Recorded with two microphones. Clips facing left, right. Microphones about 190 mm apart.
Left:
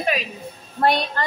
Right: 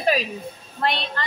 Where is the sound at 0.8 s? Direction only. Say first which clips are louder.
Left 5 dB; 40° left (ahead or behind).